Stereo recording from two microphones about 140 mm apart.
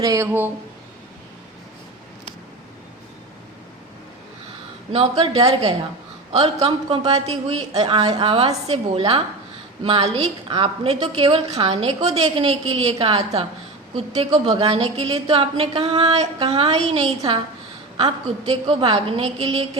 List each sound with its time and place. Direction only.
0.0 s speech: 25° right (ahead or behind)
0.3 s speech: 15° right (ahead or behind)
4.9 s a woman's voice: 45° right (ahead or behind)